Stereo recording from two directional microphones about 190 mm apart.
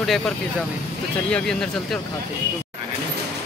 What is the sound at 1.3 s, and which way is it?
Speech, 5° left (ahead or behind).